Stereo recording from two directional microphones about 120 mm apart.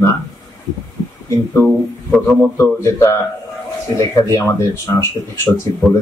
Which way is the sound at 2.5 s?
25° left (ahead or behind).